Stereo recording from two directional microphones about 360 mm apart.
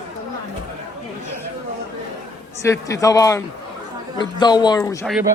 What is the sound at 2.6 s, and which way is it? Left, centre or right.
Speech, centre.